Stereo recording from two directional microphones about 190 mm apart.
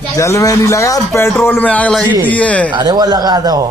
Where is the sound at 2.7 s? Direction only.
20° right (ahead or behind).